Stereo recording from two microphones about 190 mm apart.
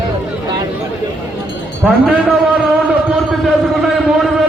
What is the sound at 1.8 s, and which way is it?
Speech, centre (ahead or behind).